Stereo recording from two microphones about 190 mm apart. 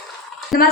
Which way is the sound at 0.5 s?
50° left (ahead or behind).